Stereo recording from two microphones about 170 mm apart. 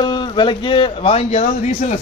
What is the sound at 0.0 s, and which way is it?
A man's voice, 25° left (ahead or behind).